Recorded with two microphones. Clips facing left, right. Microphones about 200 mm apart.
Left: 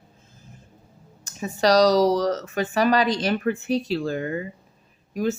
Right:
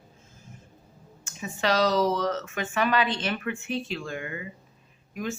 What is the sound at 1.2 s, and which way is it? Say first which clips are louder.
Speech: left 7 dB; 40° left (ahead or behind).